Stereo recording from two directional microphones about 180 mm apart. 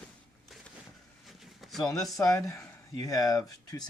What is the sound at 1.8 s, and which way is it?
Speech, 20° left (ahead or behind).